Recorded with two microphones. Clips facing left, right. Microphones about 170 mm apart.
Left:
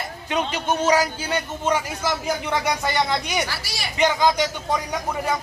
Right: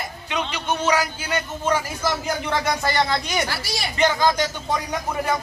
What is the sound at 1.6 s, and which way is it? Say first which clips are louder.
Speech: right 1 dB; 15° left (ahead or behind).